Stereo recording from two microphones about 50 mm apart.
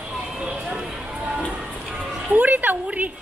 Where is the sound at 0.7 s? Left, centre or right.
Right.